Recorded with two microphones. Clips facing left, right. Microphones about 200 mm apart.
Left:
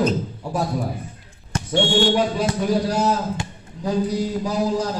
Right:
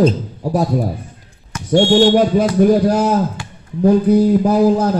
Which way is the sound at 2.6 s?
55° right (ahead or behind).